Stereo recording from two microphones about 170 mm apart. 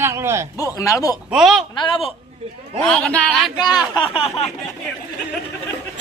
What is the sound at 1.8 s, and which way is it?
Speech, 30° left (ahead or behind).